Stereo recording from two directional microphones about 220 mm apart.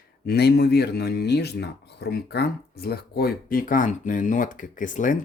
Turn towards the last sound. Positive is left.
turn(degrees=35)  # may be behind; listen again after turning